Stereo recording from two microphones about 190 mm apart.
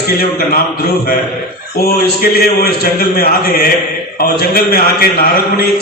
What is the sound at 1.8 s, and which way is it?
A man's voice, 55° left (ahead or behind).